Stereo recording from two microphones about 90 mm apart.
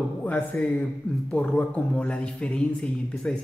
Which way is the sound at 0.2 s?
15° left (ahead or behind).